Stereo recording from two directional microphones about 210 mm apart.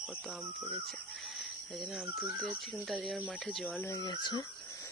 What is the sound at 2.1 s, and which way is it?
Speech, 5° right (ahead or behind).